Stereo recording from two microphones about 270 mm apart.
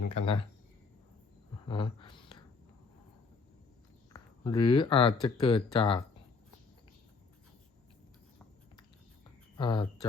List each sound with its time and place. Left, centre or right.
0.1 s speech: left
1.6 s a sound: centre
4.1 s speech: centre
9.6 s speech: centre